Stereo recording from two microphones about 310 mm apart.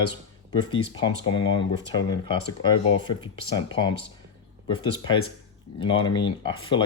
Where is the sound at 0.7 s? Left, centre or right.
Centre.